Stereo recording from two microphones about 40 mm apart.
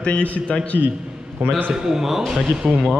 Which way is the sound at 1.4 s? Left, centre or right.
Right.